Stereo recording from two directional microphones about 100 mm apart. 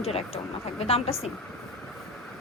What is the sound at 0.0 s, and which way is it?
Speech, 90° left.